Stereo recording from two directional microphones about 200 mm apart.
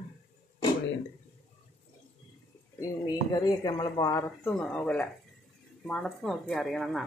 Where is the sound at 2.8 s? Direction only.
20° left (ahead or behind).